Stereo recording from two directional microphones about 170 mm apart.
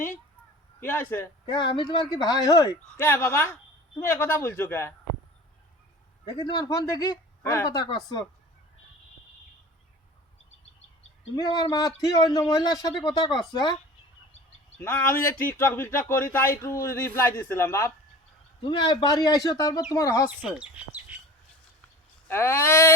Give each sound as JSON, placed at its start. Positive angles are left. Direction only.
{"t": 0.8, "sound": "speech", "side_deg": 10}
{"t": 1.5, "sound": "speech", "side_deg": 30}
{"t": 2.8, "sound": "speech", "side_deg": 10}
{"t": 6.3, "sound": "speech", "side_deg": 20}
{"t": 11.3, "sound": "speech", "side_deg": 20}
{"t": 14.8, "sound": "speech", "side_deg": 10}
{"t": 18.6, "sound": "speech", "side_deg": 25}
{"t": 20.4, "sound": "speech", "side_deg": -5}
{"t": 22.3, "sound": "speech", "side_deg": 15}